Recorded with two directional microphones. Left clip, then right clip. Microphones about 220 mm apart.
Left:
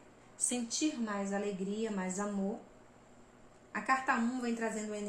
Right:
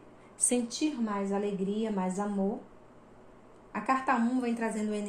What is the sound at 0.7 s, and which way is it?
A woman's voice, 25° right (ahead or behind).